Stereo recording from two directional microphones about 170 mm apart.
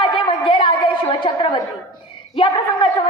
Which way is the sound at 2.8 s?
30° left (ahead or behind).